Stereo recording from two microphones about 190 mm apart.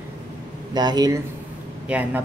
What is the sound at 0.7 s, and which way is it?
Speech, 20° right (ahead or behind).